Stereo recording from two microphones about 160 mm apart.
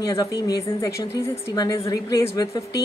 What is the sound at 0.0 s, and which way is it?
A woman's voice, 20° left (ahead or behind).